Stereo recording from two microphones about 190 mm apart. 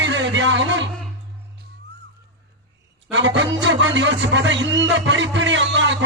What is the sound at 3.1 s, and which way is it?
Music, 75° right (ahead or behind).